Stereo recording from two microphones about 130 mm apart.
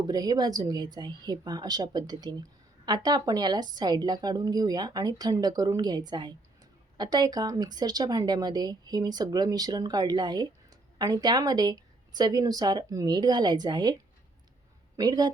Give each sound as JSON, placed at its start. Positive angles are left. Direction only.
{"t": 0.0, "sound": "a woman's voice", "side_deg": -30}
{"t": 14.9, "sound": "a woman's voice", "side_deg": -30}